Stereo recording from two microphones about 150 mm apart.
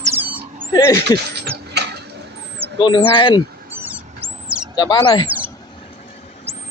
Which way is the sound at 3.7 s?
15° right (ahead or behind).